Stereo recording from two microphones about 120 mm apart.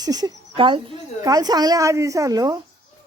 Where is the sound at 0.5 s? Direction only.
45° right (ahead or behind).